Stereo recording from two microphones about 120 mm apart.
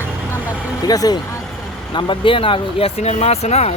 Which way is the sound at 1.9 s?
40° left (ahead or behind).